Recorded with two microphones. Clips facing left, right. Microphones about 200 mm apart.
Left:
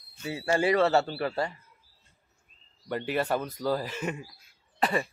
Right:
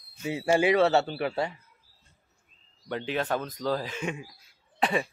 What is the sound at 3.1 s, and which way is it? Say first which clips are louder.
Speech: left 1 dB; 10° left (ahead or behind).